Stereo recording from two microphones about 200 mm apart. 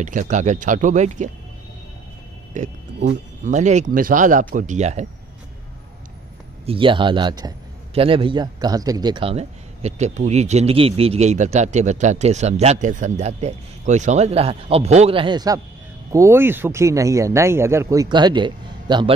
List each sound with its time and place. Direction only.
0.0 s a man's voice: 40° right (ahead or behind)
2.5 s a man's voice: 35° right (ahead or behind)
6.6 s a man's voice: 25° right (ahead or behind)